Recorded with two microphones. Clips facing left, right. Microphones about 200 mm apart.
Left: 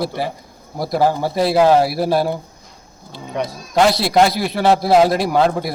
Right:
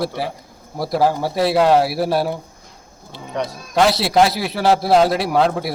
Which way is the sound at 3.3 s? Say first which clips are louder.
Left 1 dB; 5° left (ahead or behind).